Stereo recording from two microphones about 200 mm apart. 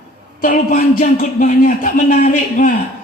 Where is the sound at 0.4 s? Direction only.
45° left (ahead or behind).